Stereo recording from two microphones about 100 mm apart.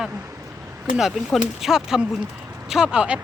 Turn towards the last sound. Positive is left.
turn(degrees=-10)  # may be behind; listen again after turning